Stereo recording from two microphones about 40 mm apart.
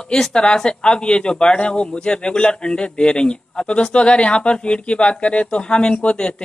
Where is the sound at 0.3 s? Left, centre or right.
Left.